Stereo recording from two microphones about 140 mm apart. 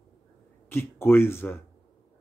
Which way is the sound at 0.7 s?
15° left (ahead or behind).